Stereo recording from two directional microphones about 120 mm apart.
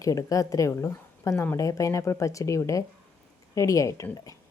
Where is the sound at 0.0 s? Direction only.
30° left (ahead or behind).